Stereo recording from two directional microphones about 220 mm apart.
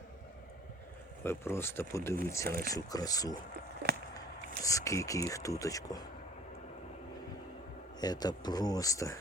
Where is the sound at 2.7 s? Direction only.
15° left (ahead or behind).